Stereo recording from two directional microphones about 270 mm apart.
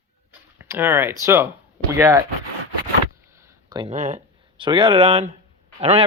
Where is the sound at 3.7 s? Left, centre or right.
Centre.